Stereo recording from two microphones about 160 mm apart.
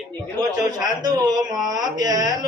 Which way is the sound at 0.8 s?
25° right (ahead or behind).